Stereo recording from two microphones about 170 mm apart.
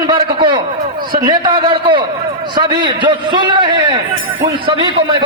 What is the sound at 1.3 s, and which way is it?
A man's voice, 25° right (ahead or behind).